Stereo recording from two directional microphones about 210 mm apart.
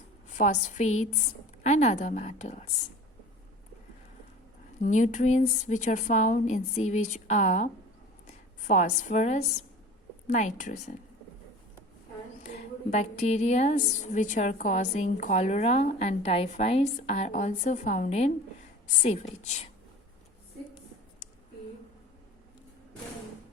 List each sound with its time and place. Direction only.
0.3 s a woman's voice: 35° left (ahead or behind)
4.8 s a woman's voice: 35° left (ahead or behind)
12.4 s a woman's voice: 35° left (ahead or behind)